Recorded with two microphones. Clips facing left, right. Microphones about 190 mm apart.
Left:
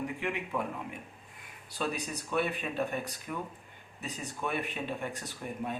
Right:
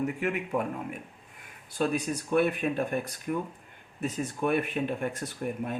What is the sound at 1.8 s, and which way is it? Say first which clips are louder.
Speech: right 6 dB; 50° right (ahead or behind).